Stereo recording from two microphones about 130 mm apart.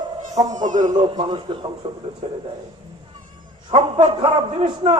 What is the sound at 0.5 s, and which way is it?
Speech, 75° right (ahead or behind).